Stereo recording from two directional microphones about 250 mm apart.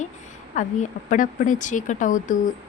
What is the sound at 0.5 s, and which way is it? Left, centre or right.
A woman's voice, left.